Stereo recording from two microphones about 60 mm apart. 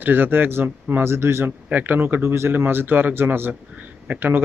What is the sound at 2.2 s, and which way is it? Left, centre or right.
Speech, right.